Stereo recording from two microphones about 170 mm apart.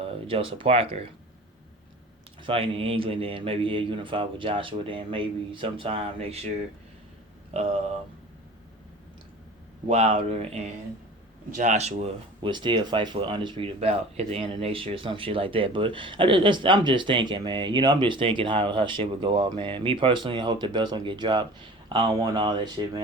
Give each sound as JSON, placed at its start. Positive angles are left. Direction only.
{"t": 0.0, "sound": "speech", "side_deg": -35}
{"t": 2.4, "sound": "speech", "side_deg": -35}
{"t": 7.5, "sound": "speech", "side_deg": -35}
{"t": 9.9, "sound": "speech", "side_deg": -40}